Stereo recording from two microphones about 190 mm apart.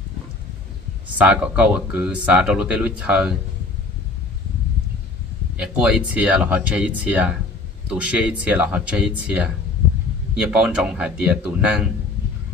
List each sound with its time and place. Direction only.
1.0 s speech: 5° right (ahead or behind)
5.6 s speech: 5° right (ahead or behind)